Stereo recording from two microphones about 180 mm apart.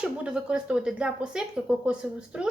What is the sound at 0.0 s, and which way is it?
Speech, 5° right (ahead or behind).